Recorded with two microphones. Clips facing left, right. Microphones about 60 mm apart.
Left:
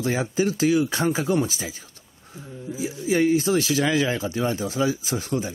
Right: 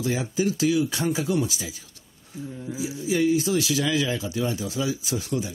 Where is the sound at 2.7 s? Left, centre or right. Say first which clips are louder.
Left 3 dB; left.